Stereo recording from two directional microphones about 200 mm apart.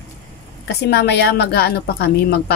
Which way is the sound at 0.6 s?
55° left (ahead or behind).